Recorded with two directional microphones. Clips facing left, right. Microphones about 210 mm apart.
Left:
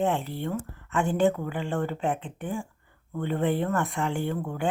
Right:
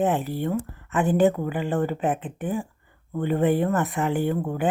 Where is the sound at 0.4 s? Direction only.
20° right (ahead or behind).